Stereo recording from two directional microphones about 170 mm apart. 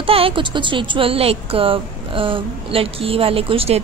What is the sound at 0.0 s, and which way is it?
Speech, 35° right (ahead or behind).